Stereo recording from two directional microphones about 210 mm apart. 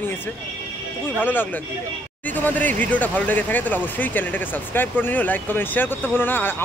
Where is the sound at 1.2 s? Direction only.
10° left (ahead or behind).